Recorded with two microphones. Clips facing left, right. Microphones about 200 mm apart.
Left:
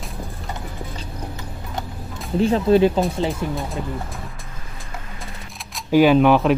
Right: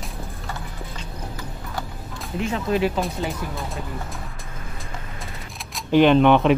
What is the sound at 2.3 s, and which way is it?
Speech, 35° left (ahead or behind).